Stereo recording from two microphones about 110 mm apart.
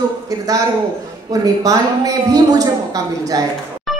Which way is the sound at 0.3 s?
35° right (ahead or behind).